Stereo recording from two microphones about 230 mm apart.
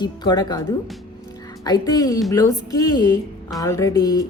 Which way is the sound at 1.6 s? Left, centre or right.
Centre.